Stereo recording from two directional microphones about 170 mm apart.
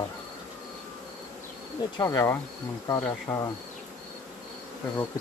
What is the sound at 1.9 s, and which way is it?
Speech, 20° left (ahead or behind).